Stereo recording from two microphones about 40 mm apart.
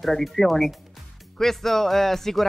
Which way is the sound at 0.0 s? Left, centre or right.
Centre.